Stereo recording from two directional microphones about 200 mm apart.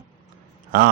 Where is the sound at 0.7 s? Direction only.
45° right (ahead or behind).